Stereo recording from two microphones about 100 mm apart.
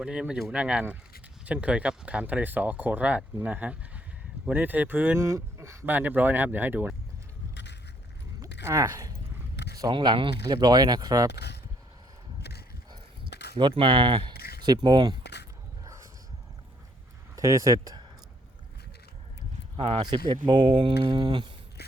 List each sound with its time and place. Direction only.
0.0 s speech: 10° right (ahead or behind)
5.2 s speech: 30° right (ahead or behind)
5.8 s speech: 20° right (ahead or behind)
8.6 s speech: 30° right (ahead or behind)
9.9 s speech: 55° right (ahead or behind)
13.6 s speech: 55° right (ahead or behind)
17.3 s speech: 35° right (ahead or behind)
19.7 s speech: 65° right (ahead or behind)
20.0 s speech: 50° right (ahead or behind)